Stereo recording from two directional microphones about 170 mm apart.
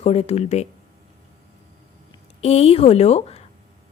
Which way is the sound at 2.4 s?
35° left (ahead or behind).